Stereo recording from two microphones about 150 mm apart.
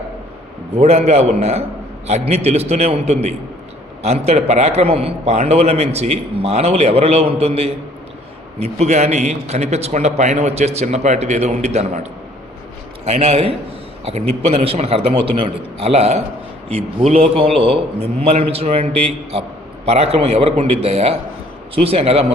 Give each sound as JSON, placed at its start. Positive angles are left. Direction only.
{"t": 0.8, "sound": "a man's voice", "side_deg": -45}
{"t": 13.1, "sound": "a man's voice", "side_deg": -45}